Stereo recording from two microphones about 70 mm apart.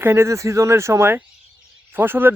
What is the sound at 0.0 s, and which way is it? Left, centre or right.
Speech, right.